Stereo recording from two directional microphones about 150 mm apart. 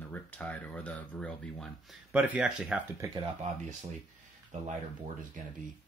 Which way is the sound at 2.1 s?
10° right (ahead or behind).